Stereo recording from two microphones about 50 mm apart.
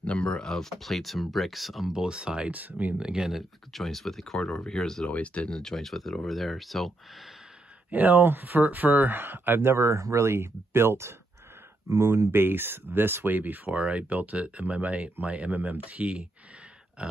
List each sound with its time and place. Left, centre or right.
0.0 s speech: left; by 1.9 s centre
1.9 s speech: centre
2.5 s speech: right
3.0 s speech: centre
3.7 s speech: centre
5.0 s speech: left
5.5 s speech: centre
7.9 s speech: right
9.6 s speech: right
12.3 s speech: right
17.0 s grunt: centre